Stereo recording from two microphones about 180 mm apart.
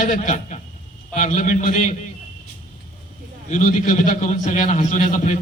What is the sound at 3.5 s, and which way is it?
A man's voice, 45° left (ahead or behind).